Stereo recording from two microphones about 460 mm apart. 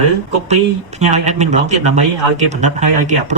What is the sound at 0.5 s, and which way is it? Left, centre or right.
Speech, centre.